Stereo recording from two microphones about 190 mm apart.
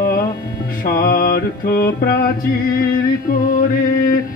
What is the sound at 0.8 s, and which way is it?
Mantra, 50° left (ahead or behind).